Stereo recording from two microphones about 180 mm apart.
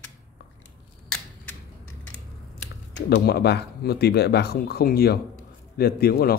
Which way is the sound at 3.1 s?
65° left (ahead or behind).